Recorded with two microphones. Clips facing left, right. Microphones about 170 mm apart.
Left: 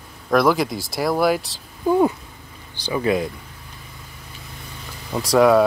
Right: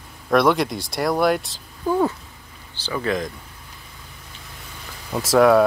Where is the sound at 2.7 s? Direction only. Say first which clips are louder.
Left 3 dB; 15° left (ahead or behind).